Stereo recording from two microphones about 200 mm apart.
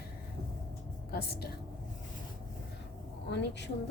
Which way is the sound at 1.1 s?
50° left (ahead or behind).